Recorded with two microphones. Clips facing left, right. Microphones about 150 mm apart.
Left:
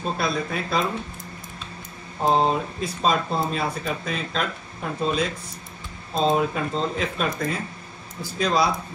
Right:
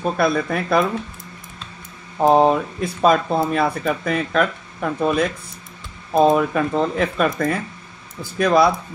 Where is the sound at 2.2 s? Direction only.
60° right (ahead or behind).